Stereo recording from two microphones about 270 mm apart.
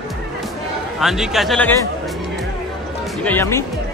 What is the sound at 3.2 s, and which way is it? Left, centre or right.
Speech, centre.